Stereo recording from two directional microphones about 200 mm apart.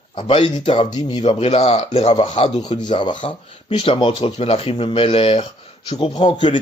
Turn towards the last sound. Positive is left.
turn(degrees=25)  # may be behind; listen again after turning